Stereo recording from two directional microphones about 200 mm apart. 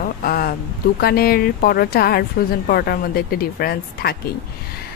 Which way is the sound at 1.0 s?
50° left (ahead or behind).